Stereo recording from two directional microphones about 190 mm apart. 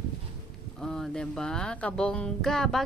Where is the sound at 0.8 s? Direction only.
5° left (ahead or behind).